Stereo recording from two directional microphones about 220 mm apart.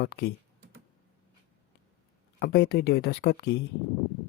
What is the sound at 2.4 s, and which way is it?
Speech, 45° left (ahead or behind).